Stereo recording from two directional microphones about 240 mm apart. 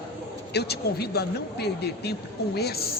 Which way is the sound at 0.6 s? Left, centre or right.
Left.